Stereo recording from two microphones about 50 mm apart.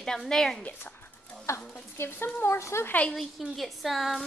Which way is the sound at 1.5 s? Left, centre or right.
Left.